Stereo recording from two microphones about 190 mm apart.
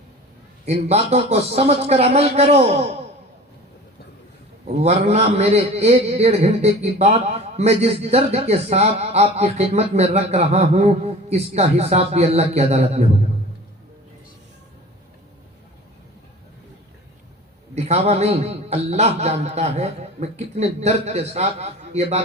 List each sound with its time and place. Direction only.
0.6 s a man's voice: 35° right (ahead or behind)
4.8 s a man's voice: 35° right (ahead or behind)
17.7 s a man's voice: 35° right (ahead or behind)